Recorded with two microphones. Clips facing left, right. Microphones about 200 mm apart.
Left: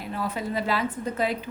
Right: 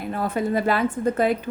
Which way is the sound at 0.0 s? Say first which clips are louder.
Right 6 dB; 50° right (ahead or behind).